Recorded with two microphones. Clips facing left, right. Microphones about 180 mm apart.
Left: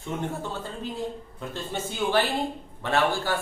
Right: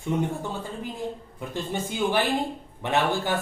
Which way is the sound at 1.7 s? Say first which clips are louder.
Even; 15° right (ahead or behind).